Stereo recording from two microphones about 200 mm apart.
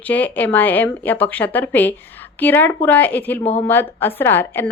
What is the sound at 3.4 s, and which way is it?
Speech, 30° left (ahead or behind).